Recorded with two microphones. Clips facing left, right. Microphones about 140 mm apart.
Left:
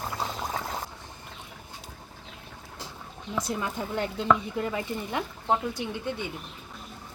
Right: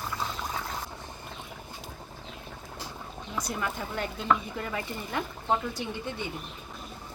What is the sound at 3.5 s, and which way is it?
Chopping, 20° left (ahead or behind).